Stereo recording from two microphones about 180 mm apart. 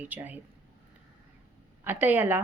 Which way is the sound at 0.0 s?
10° right (ahead or behind).